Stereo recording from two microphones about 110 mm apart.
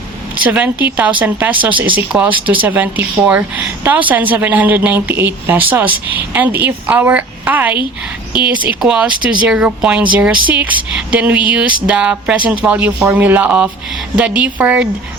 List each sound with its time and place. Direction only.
0.4 s speech: 15° right (ahead or behind)